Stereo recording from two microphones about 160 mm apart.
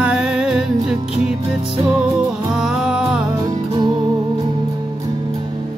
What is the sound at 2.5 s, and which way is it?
Music, 5° right (ahead or behind).